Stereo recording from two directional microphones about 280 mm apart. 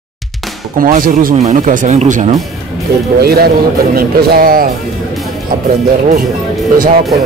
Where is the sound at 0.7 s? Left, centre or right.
Right.